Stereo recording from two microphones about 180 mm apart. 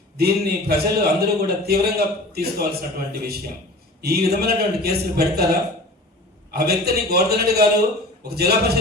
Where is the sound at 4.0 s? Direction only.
60° right (ahead or behind).